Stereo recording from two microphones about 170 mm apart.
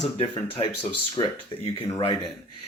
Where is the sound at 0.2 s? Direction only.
30° left (ahead or behind).